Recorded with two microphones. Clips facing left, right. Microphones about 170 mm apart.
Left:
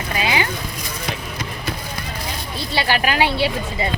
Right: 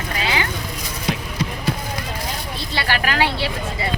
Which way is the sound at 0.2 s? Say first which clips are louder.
Left 2 dB; 15° left (ahead or behind).